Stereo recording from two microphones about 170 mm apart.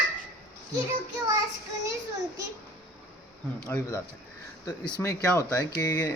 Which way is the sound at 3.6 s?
15° left (ahead or behind).